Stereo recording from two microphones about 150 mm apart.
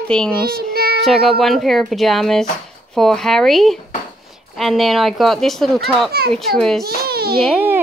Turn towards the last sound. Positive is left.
turn(degrees=0)  # may be behind; listen again after turning